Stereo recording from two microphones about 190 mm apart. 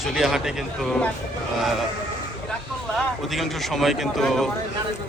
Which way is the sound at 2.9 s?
Centre (ahead or behind).